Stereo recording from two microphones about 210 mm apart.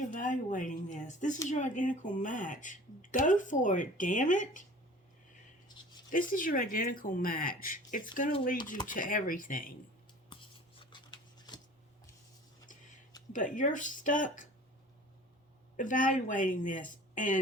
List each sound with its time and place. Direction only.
0.0 s speech: 40° left (ahead or behind)
6.1 s speech: 40° left (ahead or behind)
10.8 s scissors: 25° left (ahead or behind)
13.3 s speech: 40° left (ahead or behind)
15.8 s speech: 40° left (ahead or behind)